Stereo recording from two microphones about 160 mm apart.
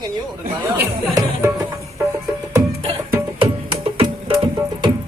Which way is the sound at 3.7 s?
35° right (ahead or behind).